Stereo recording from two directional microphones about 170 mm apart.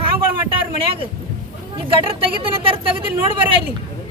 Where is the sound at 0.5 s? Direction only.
30° right (ahead or behind).